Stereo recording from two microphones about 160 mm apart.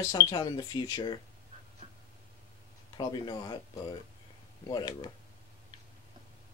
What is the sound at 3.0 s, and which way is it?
Speech, 25° left (ahead or behind).